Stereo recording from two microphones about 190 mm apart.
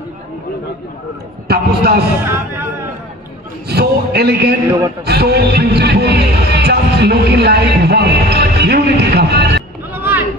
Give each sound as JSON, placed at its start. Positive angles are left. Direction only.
{"t": 1.5, "sound": "a man's voice", "side_deg": -55}
{"t": 2.2, "sound": "speech", "side_deg": -10}
{"t": 3.6, "sound": "a man's voice", "side_deg": -60}
{"t": 9.9, "sound": "a sound", "side_deg": -10}